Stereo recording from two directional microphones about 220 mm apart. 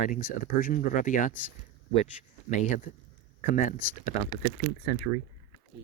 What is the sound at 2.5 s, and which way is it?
Speech, 35° left (ahead or behind).